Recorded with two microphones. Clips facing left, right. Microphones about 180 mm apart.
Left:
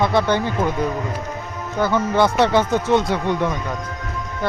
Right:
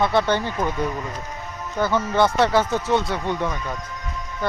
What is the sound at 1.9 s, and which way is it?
Speech, 15° left (ahead or behind).